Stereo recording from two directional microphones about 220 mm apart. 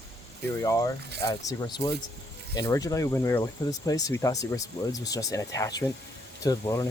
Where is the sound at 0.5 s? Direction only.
15° left (ahead or behind).